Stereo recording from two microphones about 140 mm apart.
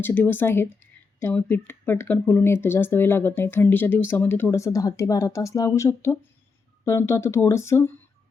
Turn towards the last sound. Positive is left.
turn(degrees=20)  # may be behind; listen again after turning